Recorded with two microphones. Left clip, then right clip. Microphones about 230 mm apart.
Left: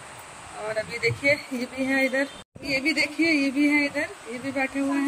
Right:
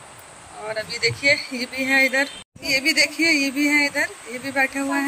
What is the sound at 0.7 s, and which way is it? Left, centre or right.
Speech, centre.